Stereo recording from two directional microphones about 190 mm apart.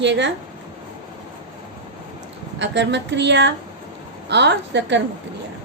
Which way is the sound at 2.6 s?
65° right (ahead or behind).